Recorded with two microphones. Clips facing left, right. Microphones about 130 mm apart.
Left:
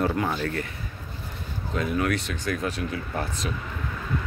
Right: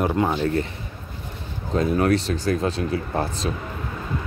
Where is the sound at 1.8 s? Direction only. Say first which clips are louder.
Right 6 dB; 35° right (ahead or behind).